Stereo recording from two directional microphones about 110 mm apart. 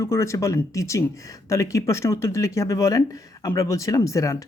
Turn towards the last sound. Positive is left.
turn(degrees=30)  # may be behind; listen again after turning